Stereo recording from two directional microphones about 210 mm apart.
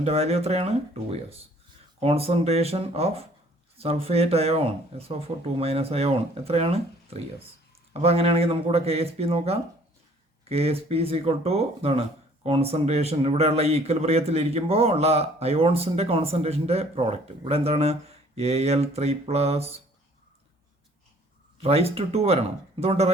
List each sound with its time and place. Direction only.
0.0 s speech: 30° right (ahead or behind)
2.0 s speech: 30° right (ahead or behind)
21.6 s speech: 30° right (ahead or behind)